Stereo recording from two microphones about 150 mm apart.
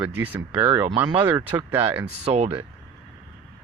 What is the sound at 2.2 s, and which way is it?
Speech, 40° right (ahead or behind).